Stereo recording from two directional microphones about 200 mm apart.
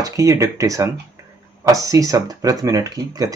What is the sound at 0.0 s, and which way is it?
Speech, 15° right (ahead or behind).